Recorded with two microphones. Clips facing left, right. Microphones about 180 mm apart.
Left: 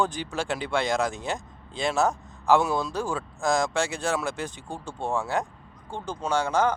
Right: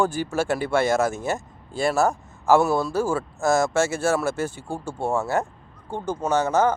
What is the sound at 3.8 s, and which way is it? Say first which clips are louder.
Speech: right 5 dB; 15° left (ahead or behind).